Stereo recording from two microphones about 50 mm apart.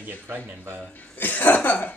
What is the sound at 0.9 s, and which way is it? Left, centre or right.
Speech, left.